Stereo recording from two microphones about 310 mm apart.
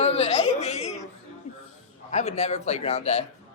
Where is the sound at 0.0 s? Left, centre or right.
Left.